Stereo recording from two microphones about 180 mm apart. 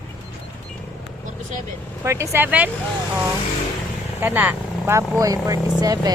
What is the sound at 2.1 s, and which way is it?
Speech, 15° right (ahead or behind).